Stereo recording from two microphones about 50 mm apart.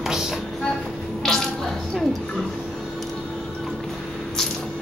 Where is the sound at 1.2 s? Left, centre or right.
Centre.